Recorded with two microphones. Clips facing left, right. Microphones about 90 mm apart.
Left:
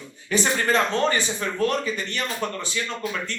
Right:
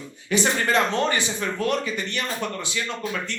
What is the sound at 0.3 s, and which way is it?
A man's voice, 35° left (ahead or behind).